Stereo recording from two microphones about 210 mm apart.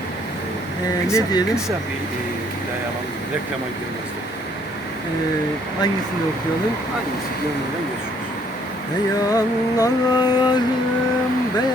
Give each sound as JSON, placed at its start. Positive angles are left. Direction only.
{"t": 1.1, "sound": "speech", "side_deg": 15}
{"t": 9.3, "sound": "mantra", "side_deg": 15}